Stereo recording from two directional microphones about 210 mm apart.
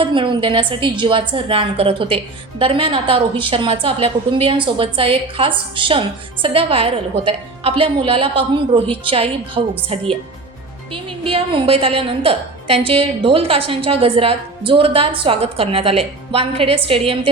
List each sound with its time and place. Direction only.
0.0 s a woman's voice: 25° right (ahead or behind)